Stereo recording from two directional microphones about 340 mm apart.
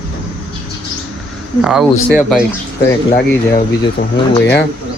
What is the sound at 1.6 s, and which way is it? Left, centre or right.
Speech, centre.